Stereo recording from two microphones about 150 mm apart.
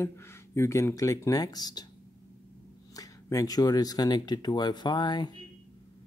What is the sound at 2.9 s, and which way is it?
Speech, 20° left (ahead or behind).